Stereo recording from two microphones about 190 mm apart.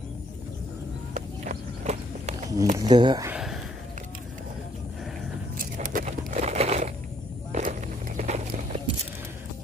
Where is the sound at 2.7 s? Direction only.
20° right (ahead or behind).